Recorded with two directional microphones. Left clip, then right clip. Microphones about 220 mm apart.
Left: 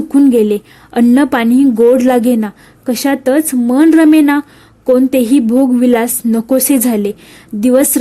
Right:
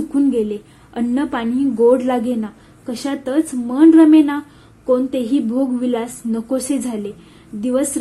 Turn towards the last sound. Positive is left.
turn(degrees=45)  # may be behind; listen again after turning